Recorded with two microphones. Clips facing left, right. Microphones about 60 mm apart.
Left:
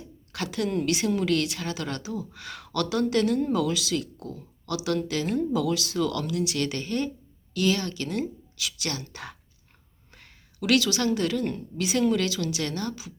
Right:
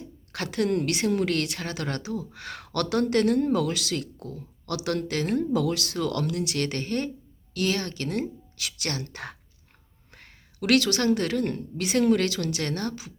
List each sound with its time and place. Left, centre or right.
0.3 s a woman's voice: right